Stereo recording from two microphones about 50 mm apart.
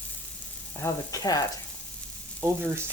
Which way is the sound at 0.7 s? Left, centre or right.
Left.